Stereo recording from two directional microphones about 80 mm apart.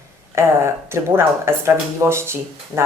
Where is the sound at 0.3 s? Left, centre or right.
Right.